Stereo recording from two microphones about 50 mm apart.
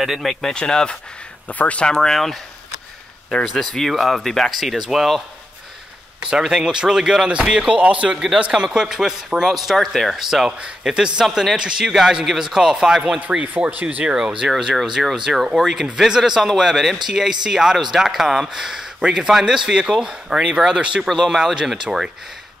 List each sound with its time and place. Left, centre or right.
0.0 s speech: centre
0.6 s speech: centre
1.5 s speech: left
1.9 s speech: centre
3.7 s speech: centre
6.3 s speech: centre
8.1 s speech: centre
13.4 s speech: right
14.1 s speech: centre
21.0 s speech: centre